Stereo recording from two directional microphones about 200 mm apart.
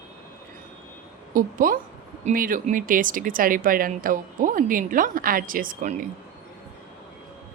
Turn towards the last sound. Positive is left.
turn(degrees=-40)  # may be behind; listen again after turning